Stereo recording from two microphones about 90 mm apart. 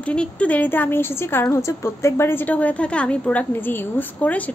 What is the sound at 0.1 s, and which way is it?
A woman's voice, 15° left (ahead or behind).